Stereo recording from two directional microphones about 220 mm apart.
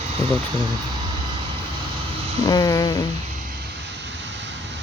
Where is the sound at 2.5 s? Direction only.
15° left (ahead or behind).